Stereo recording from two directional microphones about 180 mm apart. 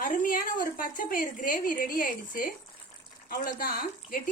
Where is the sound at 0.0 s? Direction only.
50° left (ahead or behind).